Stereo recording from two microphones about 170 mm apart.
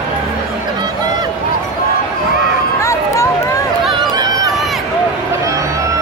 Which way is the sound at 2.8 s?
20° left (ahead or behind).